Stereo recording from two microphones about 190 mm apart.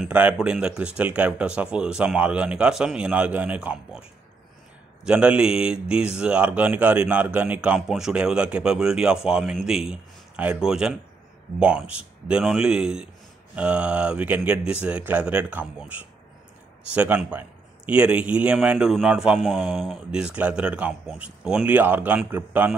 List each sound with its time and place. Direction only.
0.0 s a man's voice: 5° right (ahead or behind)
5.0 s a man's voice: 5° right (ahead or behind)